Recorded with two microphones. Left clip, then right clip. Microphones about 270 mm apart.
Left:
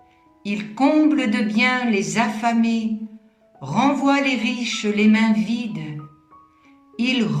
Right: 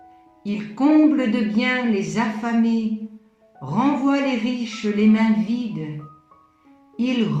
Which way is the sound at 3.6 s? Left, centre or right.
Left.